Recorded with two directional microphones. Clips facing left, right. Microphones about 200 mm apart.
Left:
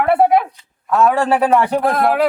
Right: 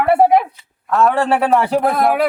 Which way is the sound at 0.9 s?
Centre (ahead or behind).